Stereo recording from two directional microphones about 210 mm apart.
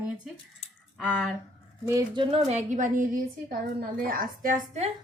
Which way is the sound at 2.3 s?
30° right (ahead or behind).